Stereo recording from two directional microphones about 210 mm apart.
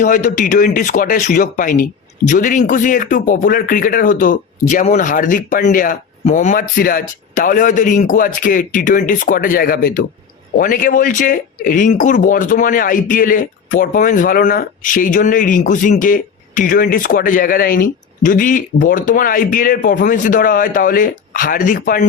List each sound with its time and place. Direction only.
0.0 s speech: 40° left (ahead or behind)